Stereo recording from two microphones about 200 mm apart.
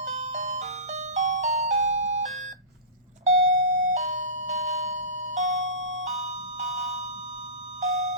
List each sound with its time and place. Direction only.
0.0 s music: 35° right (ahead or behind)
3.2 s doorbell: 35° right (ahead or behind)
5.6 s music: 70° right (ahead or behind)
6.1 s music: 35° right (ahead or behind)
7.8 s a sound: 35° right (ahead or behind)